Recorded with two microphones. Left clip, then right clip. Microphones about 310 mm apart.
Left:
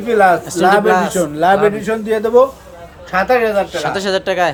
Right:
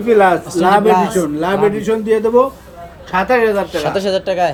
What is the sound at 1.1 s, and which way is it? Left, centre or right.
A man's voice, left.